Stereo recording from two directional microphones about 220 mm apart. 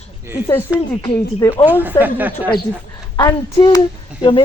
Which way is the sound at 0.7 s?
5° right (ahead or behind).